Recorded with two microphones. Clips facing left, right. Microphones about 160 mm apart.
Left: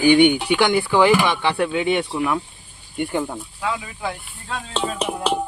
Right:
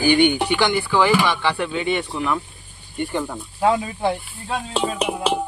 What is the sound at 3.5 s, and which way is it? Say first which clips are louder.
Speech: right 10 dB; 40° right (ahead or behind).